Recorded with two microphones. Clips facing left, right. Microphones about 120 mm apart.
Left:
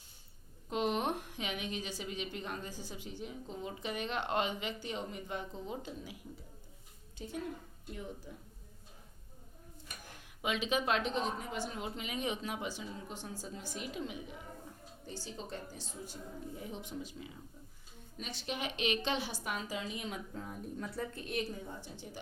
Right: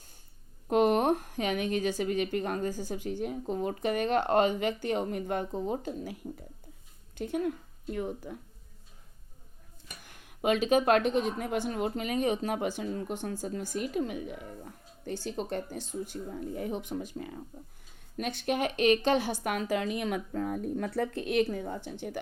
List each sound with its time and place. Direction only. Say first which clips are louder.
0.7 s a woman's voice: right 9 dB; 55° right (ahead or behind)
7.2 s a woman's voice: right 10 dB; 60° right (ahead or behind)
10.2 s speech: right 9 dB; 45° right (ahead or behind); by 22.2 s 65° right (ahead or behind)